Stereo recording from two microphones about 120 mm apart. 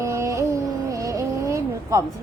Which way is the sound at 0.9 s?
30° right (ahead or behind).